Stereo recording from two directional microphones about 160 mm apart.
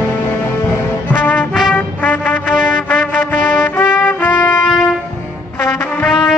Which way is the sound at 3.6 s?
15° left (ahead or behind).